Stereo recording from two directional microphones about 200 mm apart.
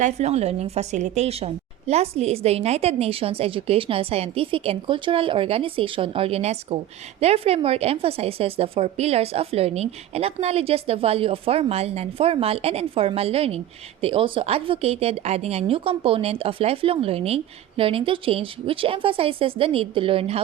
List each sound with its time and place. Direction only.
0.0 s a woman's voice: 35° right (ahead or behind)